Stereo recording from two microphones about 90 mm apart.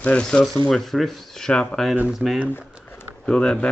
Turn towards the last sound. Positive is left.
turn(degrees=10)  # may be behind; listen again after turning